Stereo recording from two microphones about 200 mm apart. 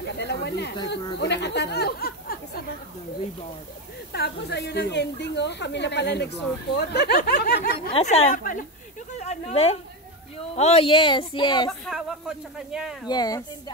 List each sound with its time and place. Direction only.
0.2 s speech: 55° left (ahead or behind)
1.2 s chatter: 60° left (ahead or behind)
4.1 s speech: 55° left (ahead or behind)
7.9 s speech: 35° left (ahead or behind)
11.8 s a man's voice: centre (ahead or behind)
13.1 s speech: 20° left (ahead or behind)